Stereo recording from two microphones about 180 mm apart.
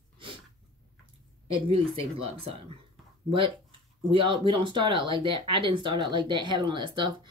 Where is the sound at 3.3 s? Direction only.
30° right (ahead or behind).